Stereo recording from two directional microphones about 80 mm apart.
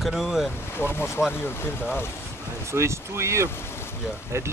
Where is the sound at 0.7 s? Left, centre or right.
Left.